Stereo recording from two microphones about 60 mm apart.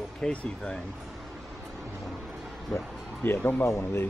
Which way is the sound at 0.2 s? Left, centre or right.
Centre.